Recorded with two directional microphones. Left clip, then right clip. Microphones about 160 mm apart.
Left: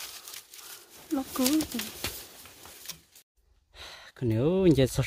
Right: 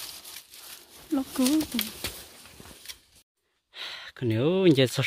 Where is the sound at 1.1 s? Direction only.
50° right (ahead or behind).